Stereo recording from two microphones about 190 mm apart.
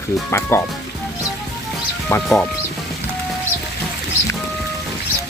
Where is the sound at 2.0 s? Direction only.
10° left (ahead or behind).